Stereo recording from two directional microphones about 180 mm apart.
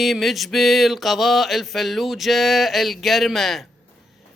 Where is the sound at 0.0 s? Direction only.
Centre (ahead or behind).